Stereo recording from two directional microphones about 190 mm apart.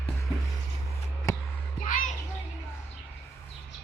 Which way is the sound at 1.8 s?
45° left (ahead or behind).